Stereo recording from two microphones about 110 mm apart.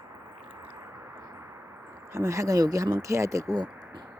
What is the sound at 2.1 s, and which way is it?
Speech, 30° right (ahead or behind).